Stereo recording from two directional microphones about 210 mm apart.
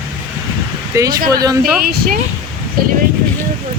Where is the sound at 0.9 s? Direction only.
15° right (ahead or behind).